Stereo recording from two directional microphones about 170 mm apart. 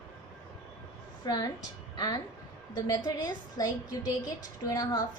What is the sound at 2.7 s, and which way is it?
A woman's voice, 20° left (ahead or behind).